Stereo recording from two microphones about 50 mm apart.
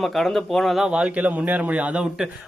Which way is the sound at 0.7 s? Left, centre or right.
Centre.